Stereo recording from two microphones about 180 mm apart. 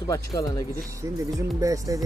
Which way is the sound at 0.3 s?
25° left (ahead or behind).